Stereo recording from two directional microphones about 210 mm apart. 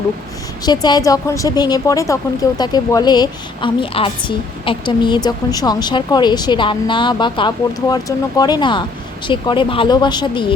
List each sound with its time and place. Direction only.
0.6 s a woman's voice: 20° left (ahead or behind)